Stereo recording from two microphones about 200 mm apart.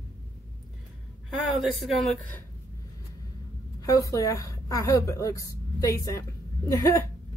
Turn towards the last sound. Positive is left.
turn(degrees=15)  # may be behind; listen again after turning